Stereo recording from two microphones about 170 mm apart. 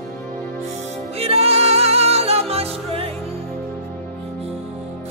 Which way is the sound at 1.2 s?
35° right (ahead or behind).